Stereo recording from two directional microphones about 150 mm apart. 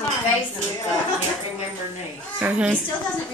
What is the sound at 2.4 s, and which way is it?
Speech, 10° right (ahead or behind).